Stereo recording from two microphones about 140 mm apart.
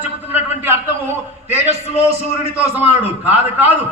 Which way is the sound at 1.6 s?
45° right (ahead or behind).